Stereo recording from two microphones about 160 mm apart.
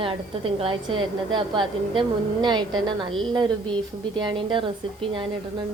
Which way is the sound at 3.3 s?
30° right (ahead or behind).